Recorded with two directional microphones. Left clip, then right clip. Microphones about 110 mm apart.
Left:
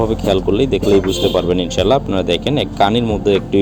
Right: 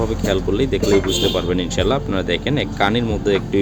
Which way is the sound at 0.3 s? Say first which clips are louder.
Left 4 dB; 30° left (ahead or behind).